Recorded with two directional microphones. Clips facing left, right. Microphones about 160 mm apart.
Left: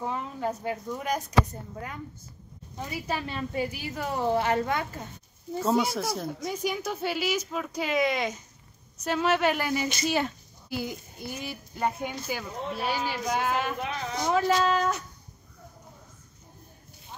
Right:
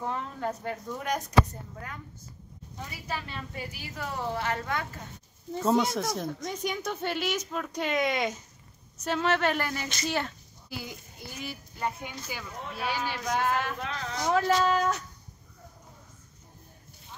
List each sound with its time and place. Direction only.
0.0 s speech: 5° left (ahead or behind)
2.8 s a woman's voice: 20° left (ahead or behind)
5.5 s a woman's voice: 5° left (ahead or behind)
12.0 s speech: 45° left (ahead or behind)
12.4 s a woman's voice: 25° left (ahead or behind)
12.9 s a woman's voice: 5° left (ahead or behind)
14.3 s speech: centre (ahead or behind)